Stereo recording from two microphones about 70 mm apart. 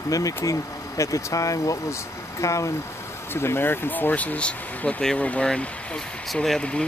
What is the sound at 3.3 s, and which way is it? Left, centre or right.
Speech, left.